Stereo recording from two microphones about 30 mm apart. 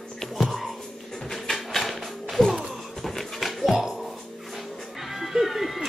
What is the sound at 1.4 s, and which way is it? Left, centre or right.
Music, centre.